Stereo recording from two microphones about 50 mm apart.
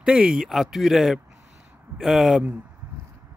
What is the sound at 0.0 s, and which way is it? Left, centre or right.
Speech, centre.